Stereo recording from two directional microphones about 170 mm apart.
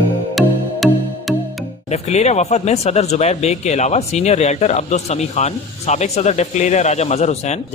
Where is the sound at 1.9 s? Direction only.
40° left (ahead or behind).